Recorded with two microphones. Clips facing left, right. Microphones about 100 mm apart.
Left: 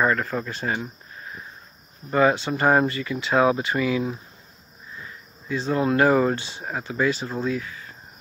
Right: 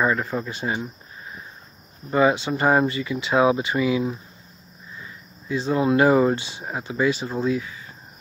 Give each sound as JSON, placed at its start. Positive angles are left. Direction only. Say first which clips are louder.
{"t": 0.0, "sound": "speech", "louder": "even", "side_deg": -5}
{"t": 2.0, "sound": "speech", "louder": "right 1 dB", "side_deg": -10}
{"t": 5.5, "sound": "speech", "louder": "right 2 dB", "side_deg": -15}